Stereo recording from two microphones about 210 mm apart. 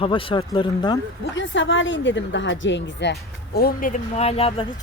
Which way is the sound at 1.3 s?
60° left (ahead or behind).